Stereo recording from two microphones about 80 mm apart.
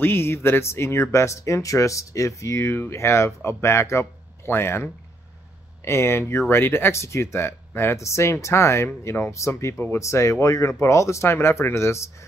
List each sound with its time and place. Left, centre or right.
0.0 s speech: left